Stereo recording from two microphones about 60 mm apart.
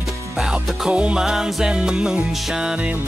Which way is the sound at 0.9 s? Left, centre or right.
Centre.